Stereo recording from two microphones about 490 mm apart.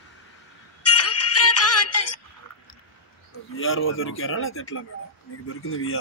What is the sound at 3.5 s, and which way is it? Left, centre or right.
Speech, left.